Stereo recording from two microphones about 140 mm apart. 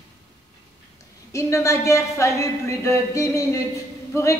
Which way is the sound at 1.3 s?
20° left (ahead or behind).